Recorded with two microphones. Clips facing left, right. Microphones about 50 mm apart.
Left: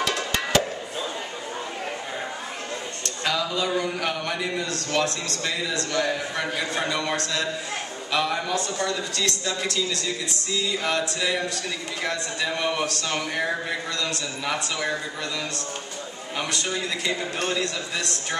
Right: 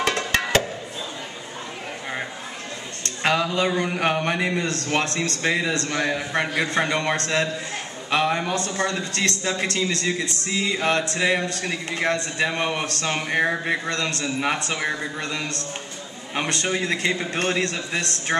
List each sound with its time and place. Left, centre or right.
0.0 s music: right
3.3 s a man's voice: right
16.3 s a man's voice: right